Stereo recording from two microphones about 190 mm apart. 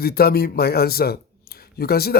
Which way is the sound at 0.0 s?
55° left (ahead or behind).